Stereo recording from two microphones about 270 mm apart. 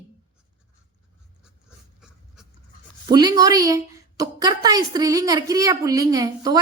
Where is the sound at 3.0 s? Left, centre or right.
Centre.